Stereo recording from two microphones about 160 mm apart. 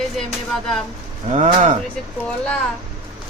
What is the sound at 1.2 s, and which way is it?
Speech, 45° right (ahead or behind).